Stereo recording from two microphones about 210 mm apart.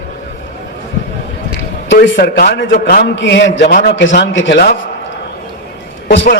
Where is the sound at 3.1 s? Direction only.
60° left (ahead or behind).